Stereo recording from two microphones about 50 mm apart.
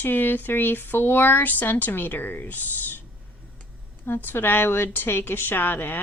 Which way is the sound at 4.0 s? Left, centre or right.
Left.